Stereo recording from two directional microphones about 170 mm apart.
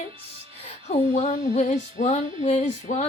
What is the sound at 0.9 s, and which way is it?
Female singing, 40° left (ahead or behind).